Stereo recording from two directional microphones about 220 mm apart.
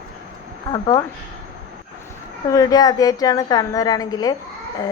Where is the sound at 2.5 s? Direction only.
15° left (ahead or behind).